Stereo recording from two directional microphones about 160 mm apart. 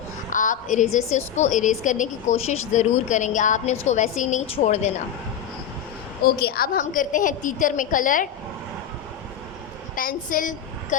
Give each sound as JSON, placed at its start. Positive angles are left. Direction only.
{"t": 0.3, "sound": "a woman's voice", "side_deg": 55}
{"t": 6.2, "sound": "a woman's voice", "side_deg": 75}
{"t": 9.9, "sound": "a woman's voice", "side_deg": 60}